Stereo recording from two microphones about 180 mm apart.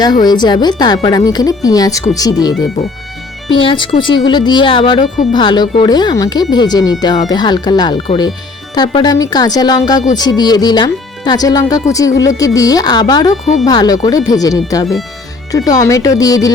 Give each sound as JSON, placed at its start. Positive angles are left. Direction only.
{"t": 0.0, "sound": "speech", "side_deg": 20}